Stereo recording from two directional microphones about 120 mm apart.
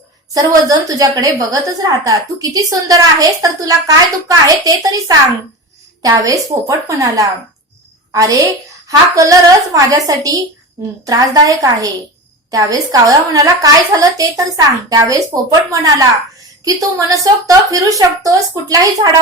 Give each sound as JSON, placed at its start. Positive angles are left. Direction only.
{"t": 0.3, "sound": "a woman's voice", "side_deg": -30}